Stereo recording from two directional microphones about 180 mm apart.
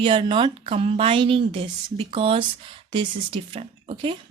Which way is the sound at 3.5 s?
30° right (ahead or behind).